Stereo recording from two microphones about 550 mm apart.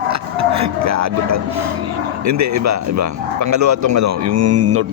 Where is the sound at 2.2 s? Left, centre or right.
Right.